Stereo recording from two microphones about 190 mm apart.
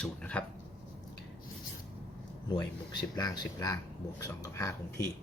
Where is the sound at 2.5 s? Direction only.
20° left (ahead or behind).